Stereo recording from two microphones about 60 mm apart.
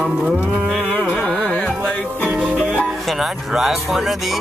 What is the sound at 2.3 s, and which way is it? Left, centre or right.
Music, centre.